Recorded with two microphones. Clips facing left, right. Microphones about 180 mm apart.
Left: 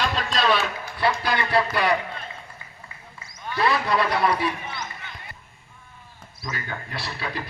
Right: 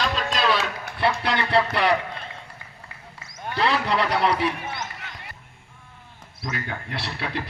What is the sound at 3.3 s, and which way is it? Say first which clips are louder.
A man's voice: even; 60° right (ahead or behind).